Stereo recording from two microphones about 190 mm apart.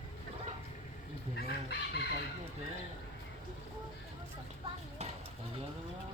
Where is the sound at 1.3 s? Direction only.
60° left (ahead or behind).